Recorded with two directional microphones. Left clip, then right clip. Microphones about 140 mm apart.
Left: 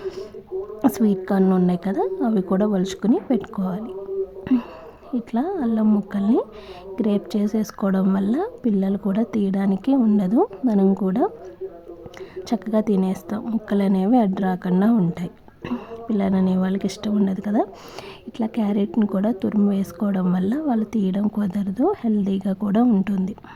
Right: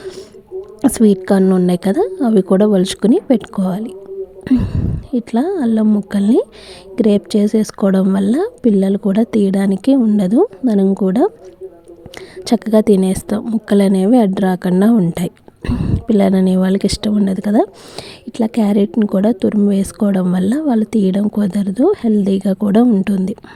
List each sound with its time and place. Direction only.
0.8 s a woman's voice: 35° right (ahead or behind)
4.4 s a sound: 25° right (ahead or behind)
5.1 s speech: 40° right (ahead or behind)
5.8 s a woman's voice: 25° right (ahead or behind)
6.1 s a woman's voice: 45° right (ahead or behind)
12.5 s a woman's voice: 40° right (ahead or behind)
15.6 s speech: 35° right (ahead or behind)
16.0 s a woman's voice: 55° right (ahead or behind)